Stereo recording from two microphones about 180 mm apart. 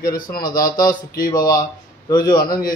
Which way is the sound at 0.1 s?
55° left (ahead or behind).